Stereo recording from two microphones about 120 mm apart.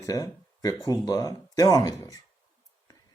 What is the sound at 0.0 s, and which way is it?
Speech, 30° left (ahead or behind).